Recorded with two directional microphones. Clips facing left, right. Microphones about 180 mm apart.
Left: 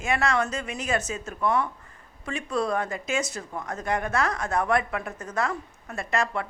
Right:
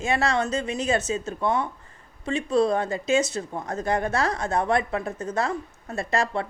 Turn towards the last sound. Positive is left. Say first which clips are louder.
# right 2 dB
turn(degrees=-30)  # may be behind; listen again after turning